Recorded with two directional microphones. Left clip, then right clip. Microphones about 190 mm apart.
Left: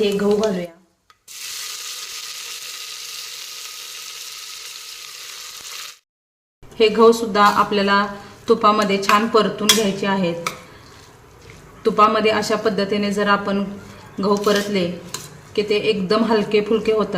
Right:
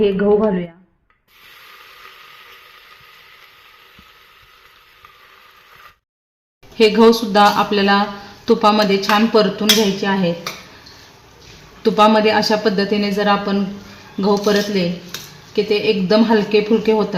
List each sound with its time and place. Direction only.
6.7 s speech: 40° right (ahead or behind)
11.8 s speech: 40° right (ahead or behind)